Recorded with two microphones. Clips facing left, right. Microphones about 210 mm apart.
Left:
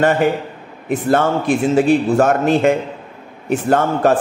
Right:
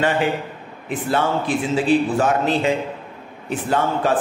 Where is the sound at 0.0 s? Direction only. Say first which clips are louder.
Left 5 dB; 45° left (ahead or behind).